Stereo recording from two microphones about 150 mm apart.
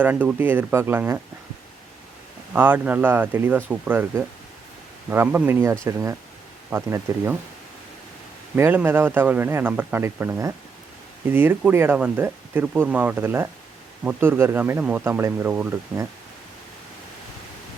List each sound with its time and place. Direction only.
0.0 s speech: 10° right (ahead or behind)
2.5 s speech: 10° right (ahead or behind)
8.5 s speech: 15° right (ahead or behind)